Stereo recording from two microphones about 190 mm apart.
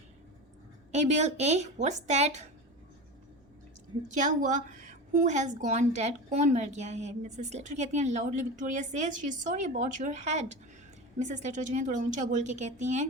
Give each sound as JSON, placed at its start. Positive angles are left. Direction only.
{"t": 0.9, "sound": "a woman's voice", "side_deg": -35}
{"t": 4.1, "sound": "a woman's voice", "side_deg": -40}